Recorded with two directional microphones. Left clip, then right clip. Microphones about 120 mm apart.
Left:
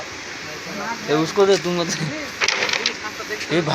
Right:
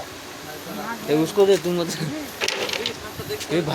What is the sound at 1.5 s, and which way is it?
Speech, 15° right (ahead or behind).